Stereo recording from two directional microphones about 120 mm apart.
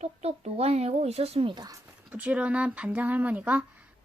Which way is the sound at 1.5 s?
35° right (ahead or behind).